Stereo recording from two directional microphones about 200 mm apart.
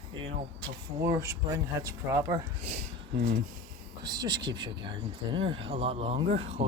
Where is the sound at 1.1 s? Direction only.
15° right (ahead or behind).